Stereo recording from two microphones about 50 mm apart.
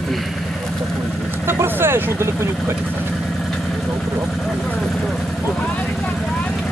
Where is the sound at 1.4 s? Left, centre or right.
Right.